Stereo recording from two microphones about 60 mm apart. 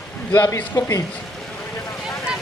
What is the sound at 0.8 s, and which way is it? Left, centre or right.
Speech, left.